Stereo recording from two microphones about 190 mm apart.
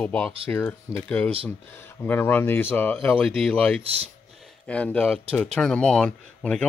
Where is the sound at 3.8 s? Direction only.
30° right (ahead or behind).